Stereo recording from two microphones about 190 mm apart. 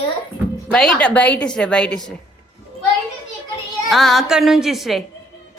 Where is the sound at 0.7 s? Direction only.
5° left (ahead or behind).